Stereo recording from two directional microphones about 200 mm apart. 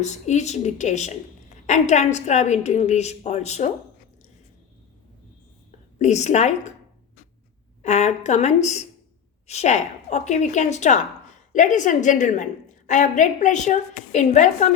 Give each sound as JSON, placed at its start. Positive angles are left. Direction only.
{"t": 0.0, "sound": "a woman's voice", "side_deg": 35}
{"t": 6.0, "sound": "a woman's voice", "side_deg": 35}
{"t": 7.8, "sound": "a woman's voice", "side_deg": 35}